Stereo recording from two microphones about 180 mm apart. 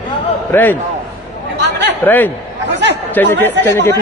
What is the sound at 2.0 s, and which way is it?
Speech, 10° left (ahead or behind).